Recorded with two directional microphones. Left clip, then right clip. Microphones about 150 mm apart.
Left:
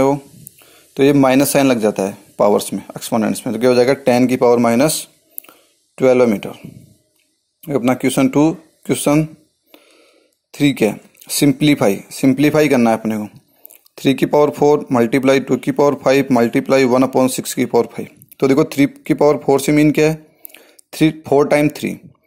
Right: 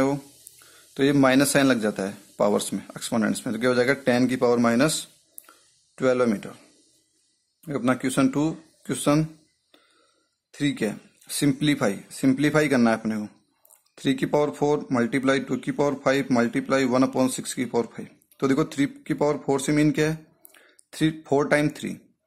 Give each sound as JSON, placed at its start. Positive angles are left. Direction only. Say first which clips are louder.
{"t": 1.2, "sound": "a man's voice", "louder": "left 7 dB", "side_deg": 20}
{"t": 7.6, "sound": "speech", "louder": "left 9 dB", "side_deg": 20}
{"t": 10.5, "sound": "speech", "louder": "left 11 dB", "side_deg": 30}
{"t": 13.0, "sound": "a man's voice", "louder": "left 8 dB", "side_deg": 15}
{"t": 13.9, "sound": "speech", "louder": "left 9 dB", "side_deg": 25}